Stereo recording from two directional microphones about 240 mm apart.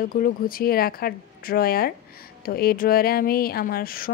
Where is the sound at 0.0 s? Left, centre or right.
Left.